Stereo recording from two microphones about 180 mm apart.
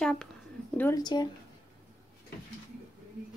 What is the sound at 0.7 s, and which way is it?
Speech, 15° left (ahead or behind).